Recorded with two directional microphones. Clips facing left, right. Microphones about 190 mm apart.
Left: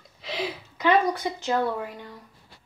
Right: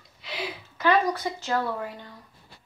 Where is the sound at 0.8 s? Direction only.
15° left (ahead or behind).